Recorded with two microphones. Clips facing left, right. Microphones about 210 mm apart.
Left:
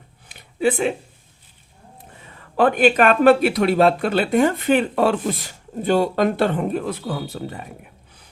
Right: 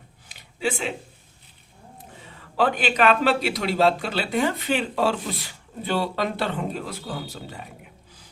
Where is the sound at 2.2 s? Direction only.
55° left (ahead or behind).